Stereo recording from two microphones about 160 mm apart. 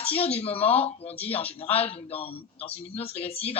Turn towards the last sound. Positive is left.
turn(degrees=40)  # may be behind; listen again after turning